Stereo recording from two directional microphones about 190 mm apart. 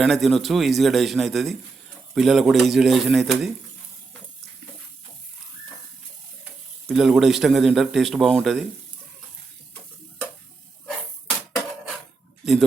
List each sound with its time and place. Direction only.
0.0 s a man's voice: centre (ahead or behind)
6.8 s a man's voice: centre (ahead or behind)